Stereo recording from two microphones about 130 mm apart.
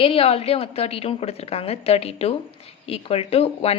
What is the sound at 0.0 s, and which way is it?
A woman's voice, 45° left (ahead or behind).